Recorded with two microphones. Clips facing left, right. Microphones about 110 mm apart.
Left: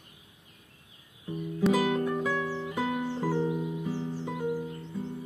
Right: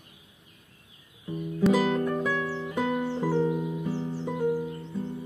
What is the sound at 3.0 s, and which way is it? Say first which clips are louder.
Music: right 3 dB; 20° right (ahead or behind).